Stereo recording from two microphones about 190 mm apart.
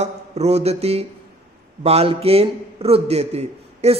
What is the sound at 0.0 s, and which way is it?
A man's voice, 35° right (ahead or behind).